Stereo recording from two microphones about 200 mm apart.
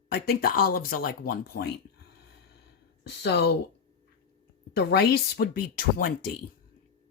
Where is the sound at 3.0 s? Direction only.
55° left (ahead or behind).